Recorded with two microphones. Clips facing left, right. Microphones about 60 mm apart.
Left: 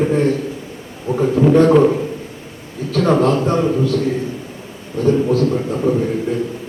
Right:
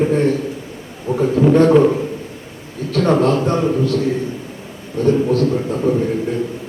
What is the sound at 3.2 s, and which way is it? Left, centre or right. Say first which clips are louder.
Speech: even; centre.